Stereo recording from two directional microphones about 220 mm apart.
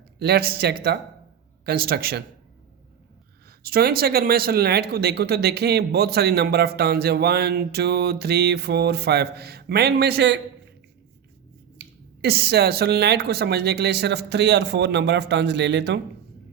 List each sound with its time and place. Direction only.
0.2 s speech: 45° right (ahead or behind)
3.6 s speech: 45° right (ahead or behind)
11.8 s speech: 45° right (ahead or behind)